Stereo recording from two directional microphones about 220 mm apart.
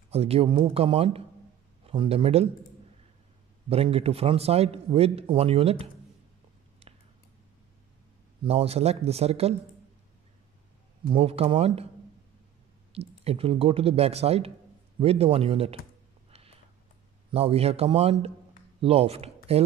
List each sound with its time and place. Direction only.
0.1 s a man's voice: 25° right (ahead or behind)
3.6 s a man's voice: 25° right (ahead or behind)
6.8 s a sound: 25° right (ahead or behind)
8.5 s a man's voice: 30° right (ahead or behind)
11.1 s a man's voice: 25° right (ahead or behind)
13.2 s a man's voice: 25° right (ahead or behind)
16.3 s a sound: 25° right (ahead or behind)
17.3 s a man's voice: 25° right (ahead or behind)